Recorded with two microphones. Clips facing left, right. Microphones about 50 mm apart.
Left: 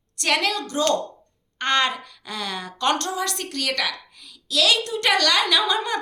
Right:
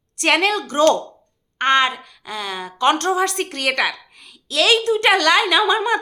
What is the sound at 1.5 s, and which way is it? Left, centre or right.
Speech, right.